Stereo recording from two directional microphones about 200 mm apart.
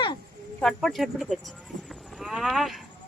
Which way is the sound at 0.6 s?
Centre (ahead or behind).